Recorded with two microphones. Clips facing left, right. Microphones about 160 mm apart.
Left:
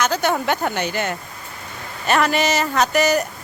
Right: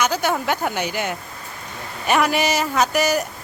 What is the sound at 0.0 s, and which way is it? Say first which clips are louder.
Speech: left 1 dB; 10° right (ahead or behind).